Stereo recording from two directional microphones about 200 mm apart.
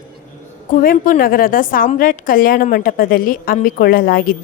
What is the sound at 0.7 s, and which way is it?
A woman's voice, 45° left (ahead or behind).